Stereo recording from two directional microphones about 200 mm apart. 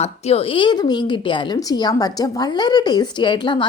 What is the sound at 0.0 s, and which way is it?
A woman's voice, 30° left (ahead or behind).